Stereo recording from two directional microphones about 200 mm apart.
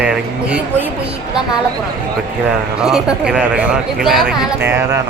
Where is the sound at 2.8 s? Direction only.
5° right (ahead or behind).